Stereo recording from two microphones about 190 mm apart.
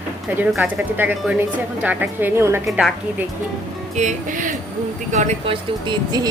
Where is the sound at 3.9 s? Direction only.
40° right (ahead or behind).